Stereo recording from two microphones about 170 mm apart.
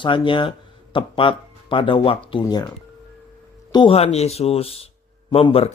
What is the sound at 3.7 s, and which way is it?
Speech, 30° left (ahead or behind).